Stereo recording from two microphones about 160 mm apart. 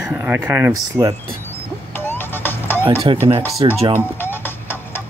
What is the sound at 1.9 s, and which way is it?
Music, 15° left (ahead or behind).